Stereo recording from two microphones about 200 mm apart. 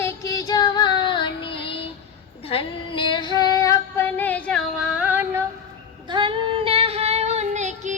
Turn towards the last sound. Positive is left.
turn(degrees=-35)  # may be behind; listen again after turning